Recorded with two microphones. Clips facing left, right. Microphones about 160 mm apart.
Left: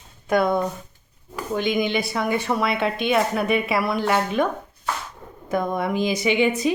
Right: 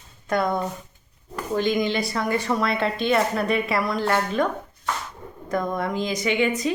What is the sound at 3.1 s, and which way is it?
A woman's voice, 5° left (ahead or behind).